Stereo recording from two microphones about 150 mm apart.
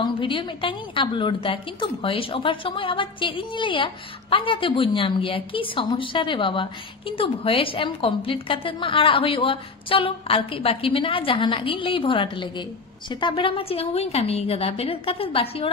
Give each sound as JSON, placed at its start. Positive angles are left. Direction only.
{"t": 0.0, "sound": "a woman's voice", "side_deg": 35}